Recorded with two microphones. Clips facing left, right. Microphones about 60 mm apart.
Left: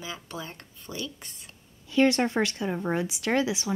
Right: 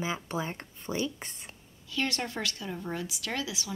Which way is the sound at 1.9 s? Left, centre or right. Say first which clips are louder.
Left 10 dB; left.